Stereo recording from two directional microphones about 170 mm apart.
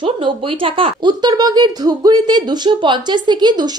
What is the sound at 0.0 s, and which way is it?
Speech, 30° right (ahead or behind).